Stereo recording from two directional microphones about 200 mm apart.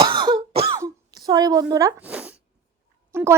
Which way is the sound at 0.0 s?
20° right (ahead or behind).